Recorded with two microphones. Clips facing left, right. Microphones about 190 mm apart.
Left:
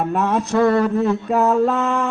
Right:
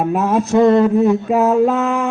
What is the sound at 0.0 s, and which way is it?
Mantra, 5° right (ahead or behind).